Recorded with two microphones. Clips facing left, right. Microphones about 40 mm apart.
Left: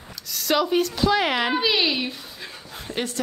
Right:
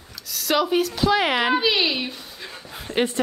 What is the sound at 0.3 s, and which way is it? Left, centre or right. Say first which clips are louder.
A woman's voice: even; centre.